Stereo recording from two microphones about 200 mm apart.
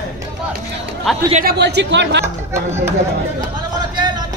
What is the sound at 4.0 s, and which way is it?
Music, 20° right (ahead or behind).